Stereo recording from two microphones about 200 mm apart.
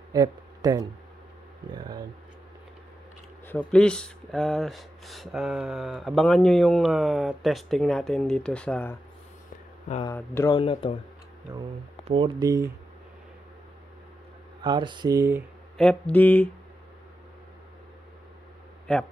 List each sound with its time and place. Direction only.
0.1 s speech: 20° right (ahead or behind)
3.4 s speech: 5° left (ahead or behind)
10.0 s a sound: 15° left (ahead or behind)
10.6 s speech: 25° left (ahead or behind)
12.1 s speech: 25° right (ahead or behind)
14.6 s speech: 25° right (ahead or behind)
15.8 s a sound: 5° left (ahead or behind)
18.9 s speech: 5° left (ahead or behind)